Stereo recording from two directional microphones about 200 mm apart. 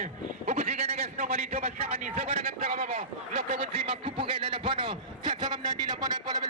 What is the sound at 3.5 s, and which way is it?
A man's voice, 25° right (ahead or behind).